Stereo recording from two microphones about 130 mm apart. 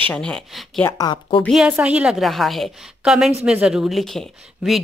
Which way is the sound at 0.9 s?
35° left (ahead or behind).